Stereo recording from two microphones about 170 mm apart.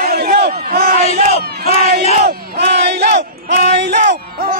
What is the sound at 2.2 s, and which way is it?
Battle cry, 75° right (ahead or behind).